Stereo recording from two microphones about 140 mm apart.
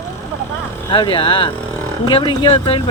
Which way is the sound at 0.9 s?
35° left (ahead or behind).